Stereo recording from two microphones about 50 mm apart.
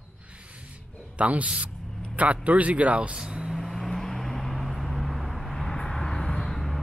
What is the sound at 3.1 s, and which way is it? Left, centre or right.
Speech, centre.